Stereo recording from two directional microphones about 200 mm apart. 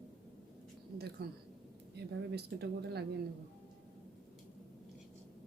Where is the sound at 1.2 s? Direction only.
55° right (ahead or behind).